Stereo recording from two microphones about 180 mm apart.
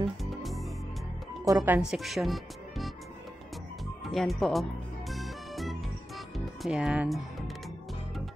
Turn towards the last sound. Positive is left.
turn(degrees=-5)  # may be behind; listen again after turning